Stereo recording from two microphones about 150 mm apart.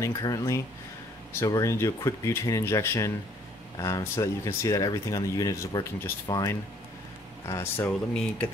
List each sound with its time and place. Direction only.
0.0 s speech: 25° left (ahead or behind)